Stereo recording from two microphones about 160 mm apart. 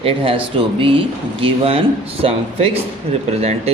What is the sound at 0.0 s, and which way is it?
Speech, 35° right (ahead or behind).